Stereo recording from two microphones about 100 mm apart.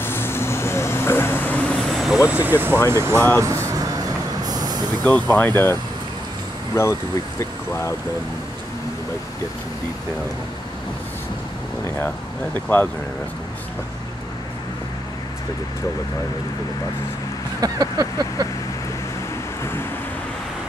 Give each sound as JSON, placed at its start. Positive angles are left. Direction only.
{"t": 0.0, "sound": "vehicle", "side_deg": 25}
{"t": 1.9, "sound": "vehicle", "side_deg": 0}
{"t": 2.2, "sound": "speech", "side_deg": -15}
{"t": 3.3, "sound": "vehicle", "side_deg": -30}
{"t": 5.0, "sound": "speech", "side_deg": 15}
{"t": 12.6, "sound": "speech", "side_deg": 15}
{"t": 17.6, "sound": "vehicle", "side_deg": -40}